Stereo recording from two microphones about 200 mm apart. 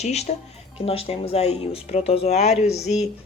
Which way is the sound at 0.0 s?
35° left (ahead or behind).